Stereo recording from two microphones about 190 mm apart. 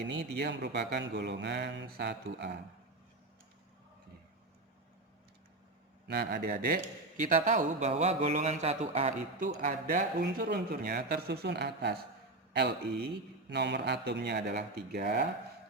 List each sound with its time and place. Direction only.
0.1 s speech: 65° right (ahead or behind)
6.1 s a man's voice: 55° right (ahead or behind)
13.5 s speech: 65° right (ahead or behind)